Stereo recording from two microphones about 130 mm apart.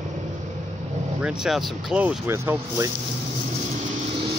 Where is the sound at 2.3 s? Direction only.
20° right (ahead or behind).